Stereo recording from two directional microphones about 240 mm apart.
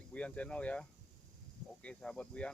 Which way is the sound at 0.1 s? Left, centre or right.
Centre.